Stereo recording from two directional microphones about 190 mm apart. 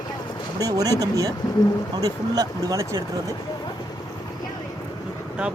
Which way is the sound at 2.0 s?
20° right (ahead or behind).